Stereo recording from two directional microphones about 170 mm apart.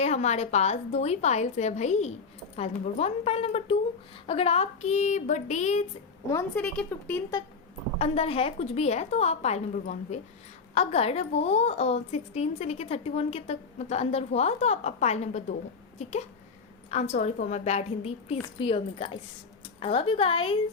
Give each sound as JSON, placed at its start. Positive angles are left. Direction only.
{"t": 0.0, "sound": "a woman's voice", "side_deg": 40}
{"t": 6.3, "sound": "speech", "side_deg": 10}
{"t": 7.9, "sound": "a woman's voice", "side_deg": 35}